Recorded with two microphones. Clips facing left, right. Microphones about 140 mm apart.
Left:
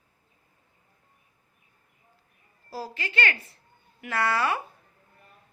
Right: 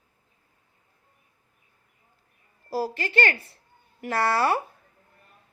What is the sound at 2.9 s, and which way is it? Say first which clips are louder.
Speech: even; 40° right (ahead or behind).